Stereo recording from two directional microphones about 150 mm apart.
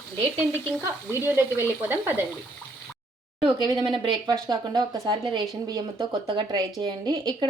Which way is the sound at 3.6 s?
30° right (ahead or behind).